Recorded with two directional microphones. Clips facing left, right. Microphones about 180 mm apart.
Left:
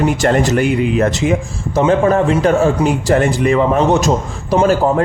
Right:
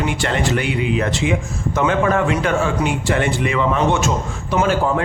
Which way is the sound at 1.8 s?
35° left (ahead or behind).